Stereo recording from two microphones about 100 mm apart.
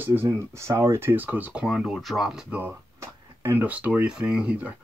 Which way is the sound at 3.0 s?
20° right (ahead or behind).